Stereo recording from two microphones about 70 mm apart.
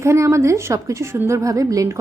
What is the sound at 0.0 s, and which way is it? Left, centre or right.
A woman's voice, right.